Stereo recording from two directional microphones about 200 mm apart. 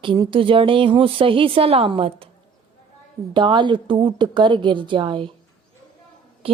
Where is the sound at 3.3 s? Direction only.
25° right (ahead or behind).